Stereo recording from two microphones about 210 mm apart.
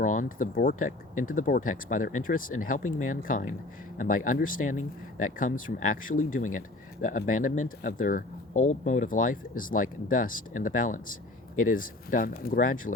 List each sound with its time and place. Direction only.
0.0 s speech: 40° left (ahead or behind)
5.6 s speech: 75° left (ahead or behind)
6.1 s speech: 40° left (ahead or behind)